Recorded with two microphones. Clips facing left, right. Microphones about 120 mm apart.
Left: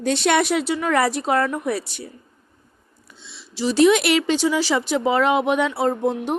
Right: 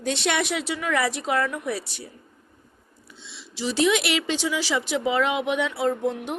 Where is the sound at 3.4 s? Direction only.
40° left (ahead or behind).